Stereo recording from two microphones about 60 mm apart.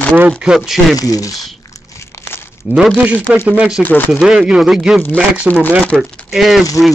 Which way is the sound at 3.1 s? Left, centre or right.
Right.